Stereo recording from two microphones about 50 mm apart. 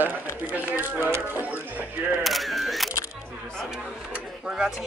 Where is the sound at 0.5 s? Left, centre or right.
Right.